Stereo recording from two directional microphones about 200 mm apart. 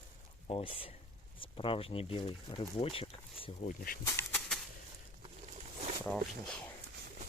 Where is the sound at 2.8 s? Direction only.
30° left (ahead or behind).